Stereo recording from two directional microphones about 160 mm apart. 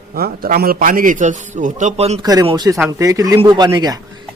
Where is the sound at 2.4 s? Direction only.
25° right (ahead or behind).